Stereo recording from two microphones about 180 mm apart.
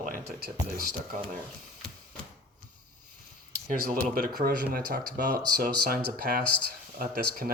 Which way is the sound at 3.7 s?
50° right (ahead or behind).